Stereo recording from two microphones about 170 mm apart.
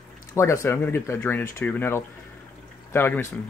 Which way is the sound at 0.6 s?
15° left (ahead or behind).